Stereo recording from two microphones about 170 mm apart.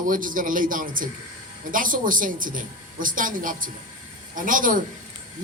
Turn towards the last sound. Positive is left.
turn(degrees=-50)  # may be behind; listen again after turning